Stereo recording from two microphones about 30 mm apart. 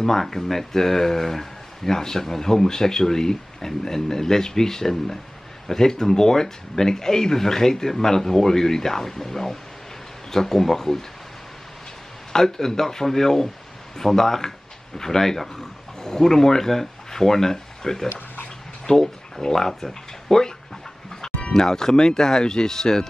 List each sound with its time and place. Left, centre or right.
0.2 s speech: centre
12.3 s speech: centre
18.9 s speech: left
19.5 s speech: centre
21.2 s a sound: centre
21.5 s speech: centre